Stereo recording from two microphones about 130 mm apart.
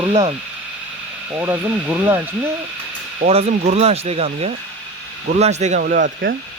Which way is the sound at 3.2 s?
90° right.